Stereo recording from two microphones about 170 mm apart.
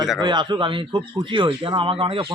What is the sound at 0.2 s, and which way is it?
A man's voice, 25° right (ahead or behind).